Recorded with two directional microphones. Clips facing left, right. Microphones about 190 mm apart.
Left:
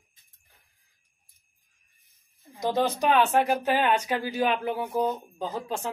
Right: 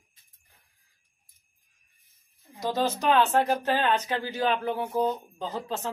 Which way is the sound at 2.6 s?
15° left (ahead or behind).